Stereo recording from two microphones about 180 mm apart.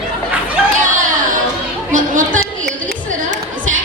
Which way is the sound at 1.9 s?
45° right (ahead or behind).